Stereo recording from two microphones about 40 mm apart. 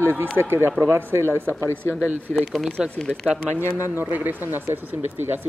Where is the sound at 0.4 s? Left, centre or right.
Right.